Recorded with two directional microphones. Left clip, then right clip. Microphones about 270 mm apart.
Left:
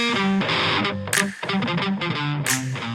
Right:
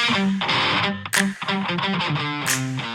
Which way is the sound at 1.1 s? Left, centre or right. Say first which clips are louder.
Even; centre.